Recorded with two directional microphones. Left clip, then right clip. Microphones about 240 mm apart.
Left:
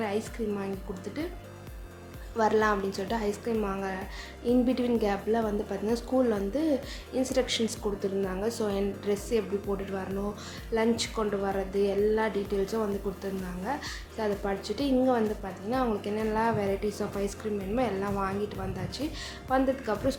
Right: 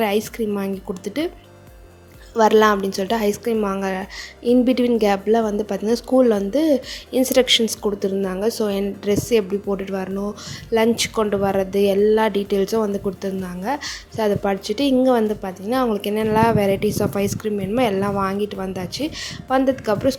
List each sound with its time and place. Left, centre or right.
0.0 s a woman's voice: right
2.3 s a woman's voice: right